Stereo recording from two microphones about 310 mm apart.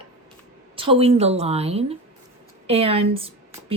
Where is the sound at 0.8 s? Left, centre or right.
Centre.